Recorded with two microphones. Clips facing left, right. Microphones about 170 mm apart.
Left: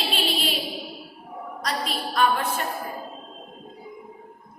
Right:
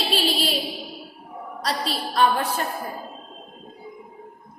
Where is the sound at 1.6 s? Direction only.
30° right (ahead or behind).